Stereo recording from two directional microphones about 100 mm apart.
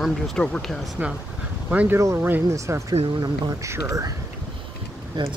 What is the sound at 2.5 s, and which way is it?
Speech, 30° right (ahead or behind).